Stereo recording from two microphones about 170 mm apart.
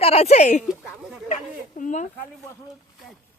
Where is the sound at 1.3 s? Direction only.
45° left (ahead or behind).